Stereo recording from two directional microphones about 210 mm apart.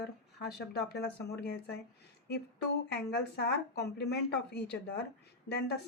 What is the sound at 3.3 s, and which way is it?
A woman's voice, 50° left (ahead or behind).